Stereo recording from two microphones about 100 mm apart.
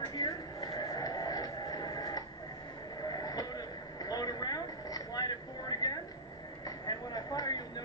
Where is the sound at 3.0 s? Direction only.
40° left (ahead or behind).